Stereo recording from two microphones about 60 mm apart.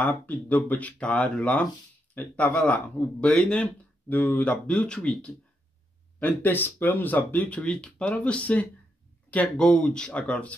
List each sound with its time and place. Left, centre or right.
0.0 s speech: left
6.1 s speech: left